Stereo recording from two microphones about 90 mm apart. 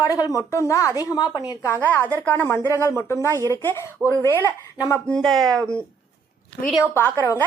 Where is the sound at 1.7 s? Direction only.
20° left (ahead or behind).